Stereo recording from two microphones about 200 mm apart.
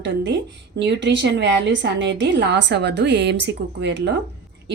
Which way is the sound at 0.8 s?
60° right (ahead or behind).